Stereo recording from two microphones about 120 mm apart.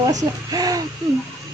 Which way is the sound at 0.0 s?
30° right (ahead or behind).